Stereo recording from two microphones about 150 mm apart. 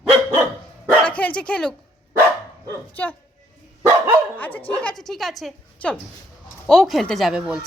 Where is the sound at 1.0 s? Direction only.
10° left (ahead or behind).